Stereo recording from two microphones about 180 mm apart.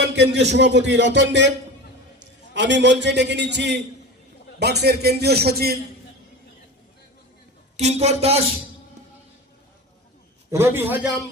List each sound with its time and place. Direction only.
0.0 s a man's voice: 70° right (ahead or behind)
7.8 s a man's voice: 40° right (ahead or behind)
10.5 s a man's voice: 15° right (ahead or behind)